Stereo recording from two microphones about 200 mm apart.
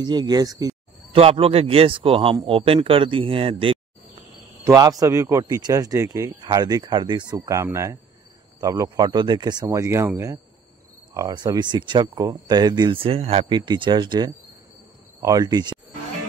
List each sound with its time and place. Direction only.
0.0 s a man's voice: 20° right (ahead or behind)